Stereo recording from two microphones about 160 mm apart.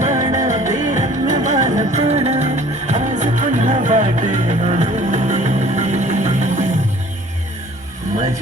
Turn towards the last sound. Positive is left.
turn(degrees=-50)  # may be behind; listen again after turning